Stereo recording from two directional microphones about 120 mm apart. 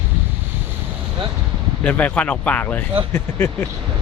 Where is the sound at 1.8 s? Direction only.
10° left (ahead or behind).